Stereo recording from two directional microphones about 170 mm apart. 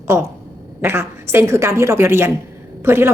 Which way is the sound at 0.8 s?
15° right (ahead or behind).